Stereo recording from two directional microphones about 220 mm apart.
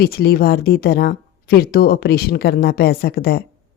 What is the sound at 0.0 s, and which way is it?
A woman's voice, 45° left (ahead or behind).